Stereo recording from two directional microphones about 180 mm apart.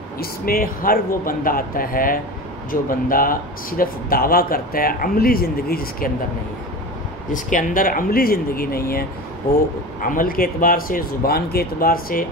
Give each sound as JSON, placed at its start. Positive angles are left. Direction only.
{"t": 0.2, "sound": "speech", "side_deg": 55}
{"t": 7.3, "sound": "speech", "side_deg": 45}
{"t": 10.0, "sound": "speech", "side_deg": 50}